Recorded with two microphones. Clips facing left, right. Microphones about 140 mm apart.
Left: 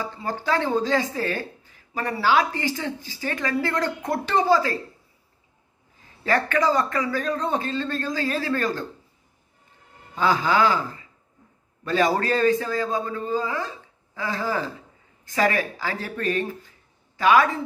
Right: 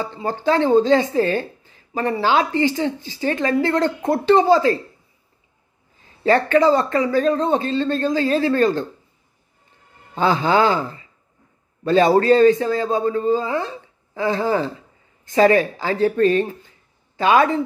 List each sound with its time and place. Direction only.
0.0 s speech: 25° right (ahead or behind)
6.2 s speech: 25° right (ahead or behind)
10.1 s a man's voice: 25° right (ahead or behind)